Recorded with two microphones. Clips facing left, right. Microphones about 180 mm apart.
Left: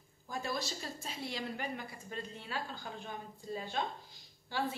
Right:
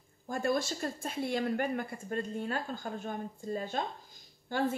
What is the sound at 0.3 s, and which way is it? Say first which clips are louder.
A woman's voice: right 7 dB; 50° right (ahead or behind).